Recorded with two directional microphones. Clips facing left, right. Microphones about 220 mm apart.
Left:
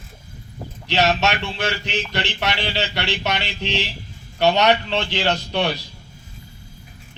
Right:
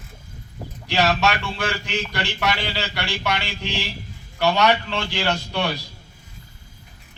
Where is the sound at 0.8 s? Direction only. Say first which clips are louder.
Left 1 dB; 20° left (ahead or behind).